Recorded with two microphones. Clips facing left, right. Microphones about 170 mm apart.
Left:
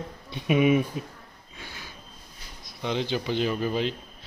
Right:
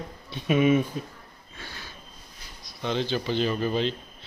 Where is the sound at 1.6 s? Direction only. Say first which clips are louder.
Right 1 dB; 15° left (ahead or behind).